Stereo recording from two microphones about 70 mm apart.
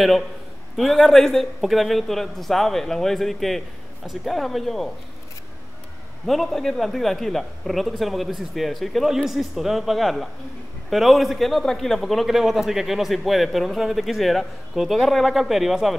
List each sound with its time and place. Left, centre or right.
0.7 s a man's voice: centre
6.2 s a man's voice: centre